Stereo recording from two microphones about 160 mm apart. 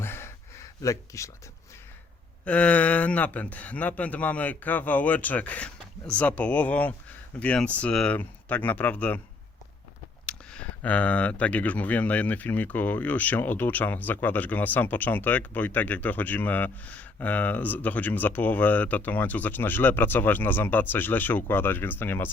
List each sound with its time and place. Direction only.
0.0 s a sound: 15° left (ahead or behind)
2.4 s speech: 10° left (ahead or behind)
10.2 s speech: 5° left (ahead or behind)